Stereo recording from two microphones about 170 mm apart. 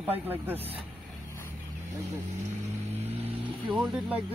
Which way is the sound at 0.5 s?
35° right (ahead or behind).